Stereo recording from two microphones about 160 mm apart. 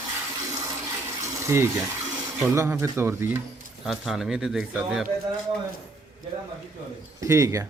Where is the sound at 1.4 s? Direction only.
15° right (ahead or behind).